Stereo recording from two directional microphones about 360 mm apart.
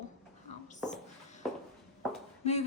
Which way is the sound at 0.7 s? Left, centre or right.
Centre.